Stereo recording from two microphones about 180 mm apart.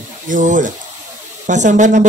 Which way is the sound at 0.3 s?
45° right (ahead or behind).